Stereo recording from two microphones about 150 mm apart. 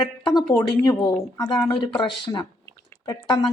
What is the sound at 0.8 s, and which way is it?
Speech, 25° left (ahead or behind).